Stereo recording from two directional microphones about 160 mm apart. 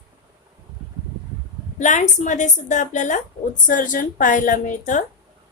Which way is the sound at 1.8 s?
50° left (ahead or behind).